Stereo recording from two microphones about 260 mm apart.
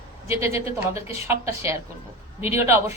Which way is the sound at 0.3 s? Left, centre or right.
Centre.